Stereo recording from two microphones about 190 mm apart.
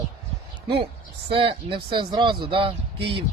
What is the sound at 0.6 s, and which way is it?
Speech, 25° right (ahead or behind).